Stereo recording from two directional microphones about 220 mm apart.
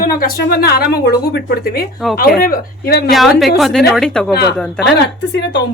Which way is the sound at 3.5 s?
Centre (ahead or behind).